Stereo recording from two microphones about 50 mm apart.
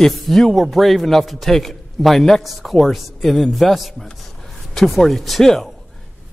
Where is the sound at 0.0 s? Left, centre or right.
Centre.